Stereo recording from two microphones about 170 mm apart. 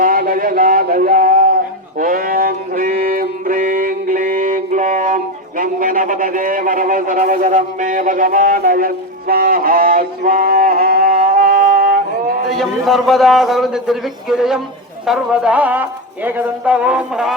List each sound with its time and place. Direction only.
0.0 s a sound: 55° right (ahead or behind)
2.0 s music: 55° right (ahead or behind)
12.5 s a man's voice: centre (ahead or behind)